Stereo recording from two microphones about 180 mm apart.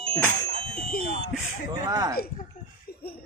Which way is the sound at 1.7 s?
20° right (ahead or behind).